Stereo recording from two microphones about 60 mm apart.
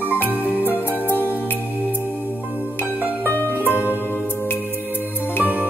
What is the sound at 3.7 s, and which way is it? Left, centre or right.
Music, right.